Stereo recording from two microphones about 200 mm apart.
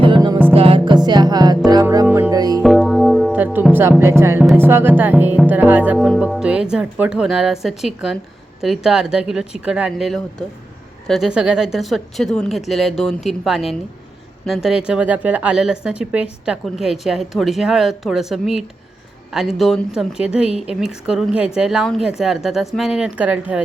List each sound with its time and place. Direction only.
0.0 s music: 20° right (ahead or behind)
2.6 s music: centre (ahead or behind)
4.5 s speech: 10° right (ahead or behind)